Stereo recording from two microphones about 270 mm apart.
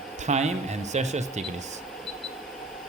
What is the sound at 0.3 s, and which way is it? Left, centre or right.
Speech, right.